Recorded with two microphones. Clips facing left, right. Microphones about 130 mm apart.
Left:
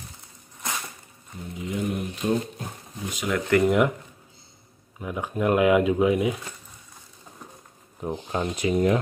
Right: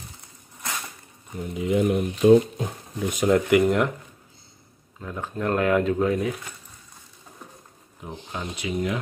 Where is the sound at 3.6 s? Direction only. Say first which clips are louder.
Left 1 dB; 5° left (ahead or behind).